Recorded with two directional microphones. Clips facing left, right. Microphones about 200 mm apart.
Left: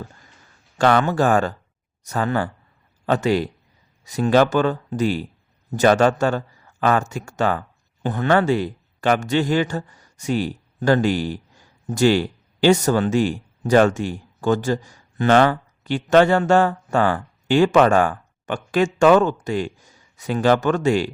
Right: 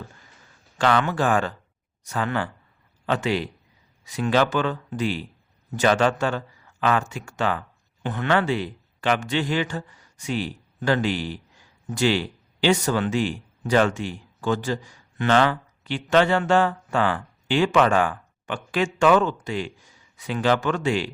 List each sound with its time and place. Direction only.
0.8 s a man's voice: 45° left (ahead or behind)